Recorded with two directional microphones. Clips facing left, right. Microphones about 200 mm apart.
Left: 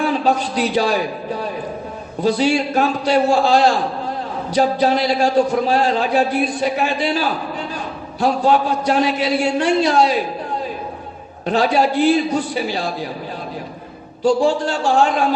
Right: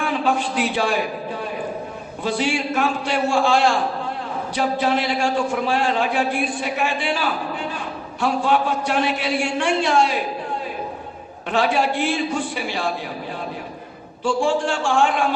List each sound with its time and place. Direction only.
0.0 s a man's voice: 40° left (ahead or behind)
11.4 s a man's voice: 40° left (ahead or behind)
14.3 s a man's voice: 40° left (ahead or behind)